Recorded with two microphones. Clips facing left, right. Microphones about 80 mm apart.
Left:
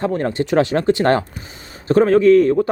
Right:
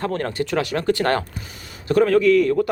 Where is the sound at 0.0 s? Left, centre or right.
Left.